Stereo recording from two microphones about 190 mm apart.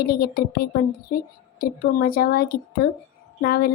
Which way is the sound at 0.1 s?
60° left (ahead or behind).